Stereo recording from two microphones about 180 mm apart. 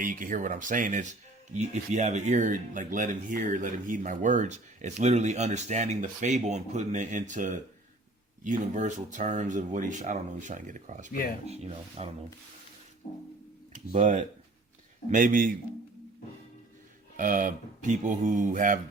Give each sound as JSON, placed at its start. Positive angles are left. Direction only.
{"t": 0.0, "sound": "speech", "side_deg": -50}
{"t": 15.1, "sound": "speech", "side_deg": -50}
{"t": 17.2, "sound": "speech", "side_deg": -45}